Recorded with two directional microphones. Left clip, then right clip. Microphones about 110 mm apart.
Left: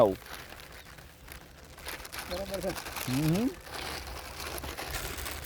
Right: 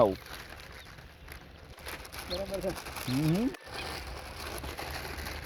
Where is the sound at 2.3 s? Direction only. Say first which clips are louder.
Right 1 dB; 55° left (ahead or behind).